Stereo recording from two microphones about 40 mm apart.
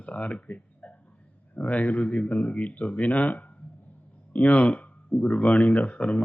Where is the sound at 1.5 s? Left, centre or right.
Left.